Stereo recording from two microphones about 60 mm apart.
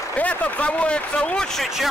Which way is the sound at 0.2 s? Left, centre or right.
Left.